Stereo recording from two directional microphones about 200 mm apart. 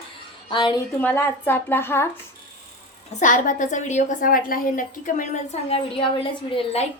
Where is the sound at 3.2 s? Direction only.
40° left (ahead or behind).